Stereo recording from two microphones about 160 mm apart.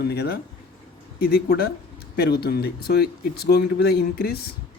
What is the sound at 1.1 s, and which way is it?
Speech, 70° left (ahead or behind).